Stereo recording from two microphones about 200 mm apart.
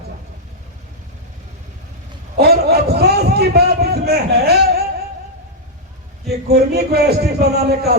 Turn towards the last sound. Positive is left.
turn(degrees=-50)  # may be behind; listen again after turning